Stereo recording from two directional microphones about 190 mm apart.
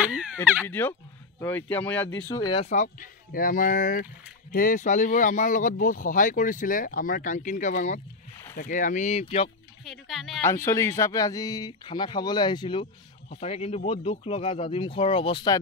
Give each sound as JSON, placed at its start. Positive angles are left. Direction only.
{"t": 0.0, "sound": "a sound", "side_deg": -5}
{"t": 0.7, "sound": "speech", "side_deg": 10}
{"t": 2.6, "sound": "speech", "side_deg": 40}
{"t": 9.8, "sound": "speech", "side_deg": 0}
{"t": 10.4, "sound": "speech", "side_deg": 15}